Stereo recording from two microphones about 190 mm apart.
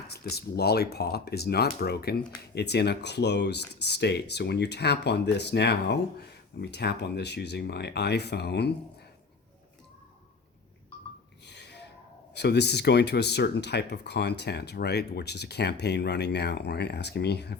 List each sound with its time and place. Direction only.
0.1 s speech: 55° left (ahead or behind)
11.4 s gasp: 65° left (ahead or behind)
12.3 s speech: 60° left (ahead or behind)